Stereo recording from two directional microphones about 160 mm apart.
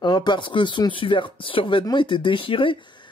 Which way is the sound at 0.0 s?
25° left (ahead or behind).